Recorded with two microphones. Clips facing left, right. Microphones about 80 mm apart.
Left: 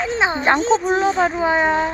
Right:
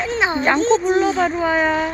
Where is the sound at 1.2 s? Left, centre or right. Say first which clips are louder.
Even; centre.